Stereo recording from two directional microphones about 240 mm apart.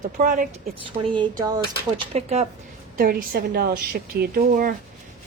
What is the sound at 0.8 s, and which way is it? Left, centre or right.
Speech, right.